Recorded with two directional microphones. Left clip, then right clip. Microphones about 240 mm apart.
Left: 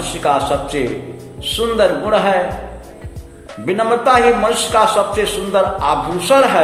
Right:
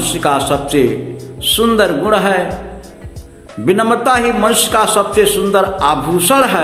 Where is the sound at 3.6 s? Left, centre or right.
Centre.